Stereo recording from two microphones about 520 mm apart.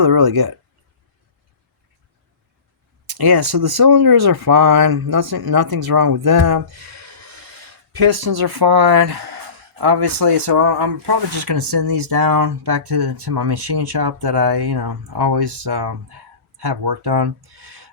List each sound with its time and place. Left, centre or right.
0.0 s speech: right
3.1 s speech: right